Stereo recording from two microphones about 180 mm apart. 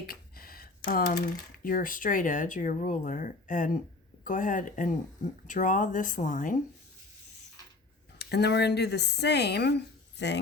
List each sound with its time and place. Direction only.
0.1 s speech: 55° left (ahead or behind)
8.2 s speech: 65° left (ahead or behind)